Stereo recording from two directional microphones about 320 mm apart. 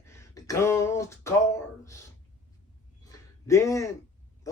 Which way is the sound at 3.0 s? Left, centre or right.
Centre.